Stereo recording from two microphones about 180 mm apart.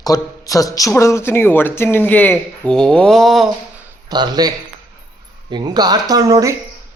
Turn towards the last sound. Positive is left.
turn(degrees=-20)  # may be behind; listen again after turning